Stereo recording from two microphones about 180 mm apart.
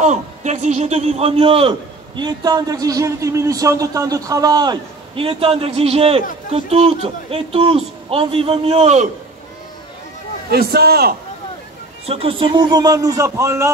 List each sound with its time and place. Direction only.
0.0 s a man's voice: 40° right (ahead or behind)
10.5 s a man's voice: 60° right (ahead or behind)
12.1 s a man's voice: 30° right (ahead or behind)